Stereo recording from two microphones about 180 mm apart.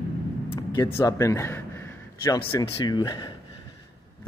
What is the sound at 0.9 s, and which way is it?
A man's voice, 15° left (ahead or behind).